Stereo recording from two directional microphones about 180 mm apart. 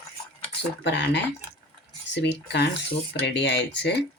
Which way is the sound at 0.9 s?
75° left (ahead or behind).